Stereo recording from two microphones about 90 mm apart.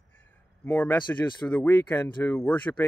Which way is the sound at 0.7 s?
20° left (ahead or behind).